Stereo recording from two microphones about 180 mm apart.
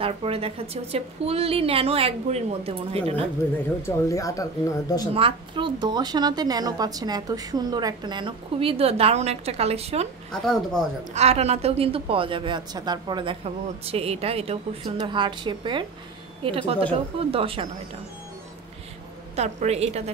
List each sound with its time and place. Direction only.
0.0 s a woman's voice: 30° right (ahead or behind)
3.8 s speech: 20° left (ahead or behind)
5.1 s a woman's voice: 30° right (ahead or behind)
10.3 s speech: 5° left (ahead or behind)
11.1 s a woman's voice: 35° right (ahead or behind)
19.3 s a woman's voice: 35° right (ahead or behind)